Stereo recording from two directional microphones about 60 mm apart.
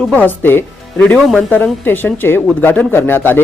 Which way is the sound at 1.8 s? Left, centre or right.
Left.